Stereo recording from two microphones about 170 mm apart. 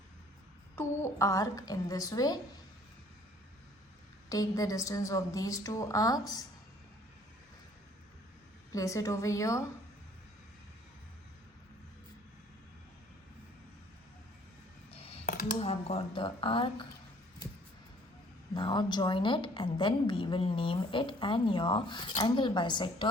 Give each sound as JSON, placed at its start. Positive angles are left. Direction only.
{"t": 0.8, "sound": "a woman's voice", "side_deg": 15}
{"t": 4.3, "sound": "a woman's voice", "side_deg": 20}
{"t": 8.7, "sound": "a woman's voice", "side_deg": 20}
{"t": 14.8, "sound": "music", "side_deg": 35}
{"t": 15.3, "sound": "dishes", "side_deg": 55}
{"t": 15.5, "sound": "speech", "side_deg": 35}
{"t": 18.5, "sound": "a woman's voice", "side_deg": 30}